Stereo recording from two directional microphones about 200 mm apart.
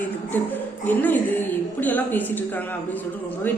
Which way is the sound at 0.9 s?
10° left (ahead or behind).